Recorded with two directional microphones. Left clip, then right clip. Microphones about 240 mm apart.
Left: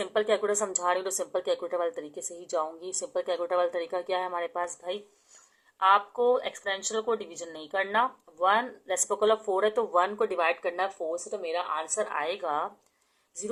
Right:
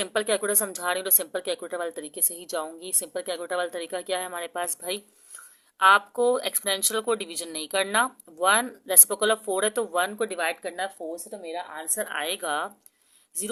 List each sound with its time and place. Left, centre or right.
0.0 s speech: right